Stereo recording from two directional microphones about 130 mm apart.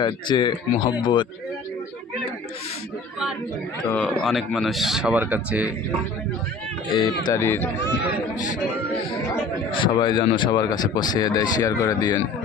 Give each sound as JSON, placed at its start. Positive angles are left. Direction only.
{"t": 0.0, "sound": "speech", "side_deg": 35}
{"t": 3.8, "sound": "speech", "side_deg": 10}
{"t": 6.9, "sound": "speech", "side_deg": 35}
{"t": 7.3, "sound": "speech", "side_deg": 20}
{"t": 9.7, "sound": "speech", "side_deg": 35}